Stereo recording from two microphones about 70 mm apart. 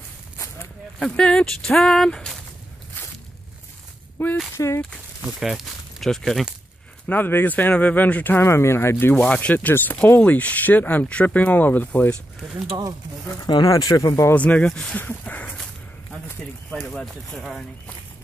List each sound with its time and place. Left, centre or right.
0.9 s speech: centre
4.2 s speech: left
4.6 s speech: left
5.2 s speech: centre
7.1 s speech: left
8.5 s speech: left
9.1 s speech: centre
13.7 s speech: left
14.3 s speech: left
14.7 s speech: centre
15.0 s speech: left
17.0 s speech: centre